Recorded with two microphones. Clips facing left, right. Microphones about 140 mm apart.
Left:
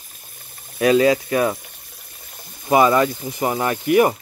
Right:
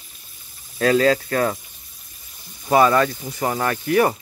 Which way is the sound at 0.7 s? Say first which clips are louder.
Left 2 dB; 20° left (ahead or behind).